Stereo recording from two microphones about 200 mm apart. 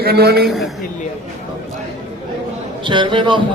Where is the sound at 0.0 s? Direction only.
50° right (ahead or behind).